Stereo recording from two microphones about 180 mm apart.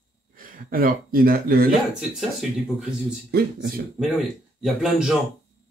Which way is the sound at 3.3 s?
60° right (ahead or behind).